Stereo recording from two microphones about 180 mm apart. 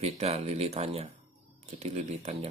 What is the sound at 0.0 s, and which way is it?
Speech, 35° right (ahead or behind).